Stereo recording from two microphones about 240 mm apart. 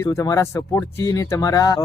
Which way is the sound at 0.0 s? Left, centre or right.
Centre.